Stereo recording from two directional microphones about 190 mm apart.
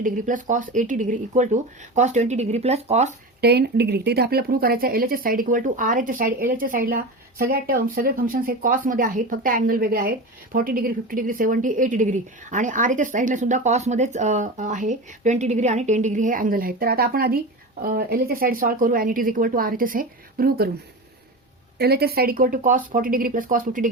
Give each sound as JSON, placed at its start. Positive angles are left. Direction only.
{"t": 0.0, "sound": "speech", "side_deg": -45}
{"t": 3.4, "sound": "speech", "side_deg": -60}
{"t": 21.8, "sound": "speech", "side_deg": -55}